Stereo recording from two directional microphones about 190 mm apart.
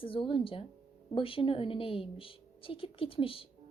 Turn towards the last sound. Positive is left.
turn(degrees=30)  # may be behind; listen again after turning